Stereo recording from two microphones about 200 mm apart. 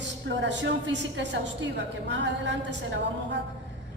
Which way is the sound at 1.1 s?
65° right (ahead or behind).